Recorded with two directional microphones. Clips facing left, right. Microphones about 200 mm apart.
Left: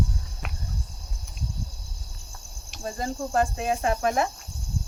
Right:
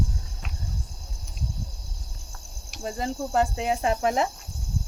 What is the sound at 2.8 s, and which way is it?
Speech, 20° right (ahead or behind).